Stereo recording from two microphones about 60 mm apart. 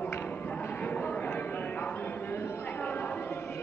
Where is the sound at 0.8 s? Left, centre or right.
Left.